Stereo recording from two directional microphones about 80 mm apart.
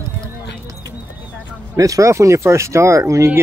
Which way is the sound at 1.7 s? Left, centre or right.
Right.